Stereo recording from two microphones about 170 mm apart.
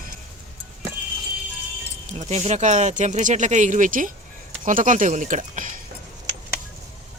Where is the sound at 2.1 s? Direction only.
40° right (ahead or behind).